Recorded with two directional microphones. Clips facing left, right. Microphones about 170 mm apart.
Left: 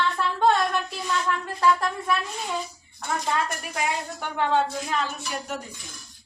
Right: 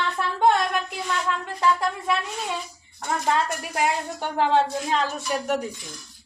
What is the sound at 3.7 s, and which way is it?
Speech, 30° right (ahead or behind).